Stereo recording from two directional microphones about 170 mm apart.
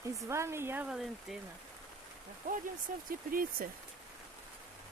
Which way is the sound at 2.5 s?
55° right (ahead or behind).